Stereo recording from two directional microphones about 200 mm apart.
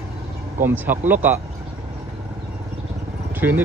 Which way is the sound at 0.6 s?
10° right (ahead or behind).